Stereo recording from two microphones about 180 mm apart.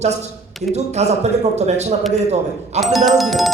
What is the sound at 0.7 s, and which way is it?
A man's voice, 40° right (ahead or behind).